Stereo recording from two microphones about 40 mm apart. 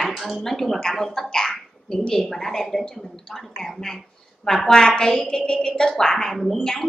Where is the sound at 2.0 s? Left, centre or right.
Centre.